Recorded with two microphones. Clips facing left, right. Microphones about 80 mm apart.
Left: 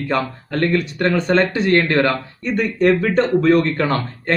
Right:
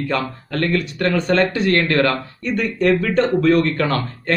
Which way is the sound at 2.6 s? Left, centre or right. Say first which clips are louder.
Left 2 dB; left.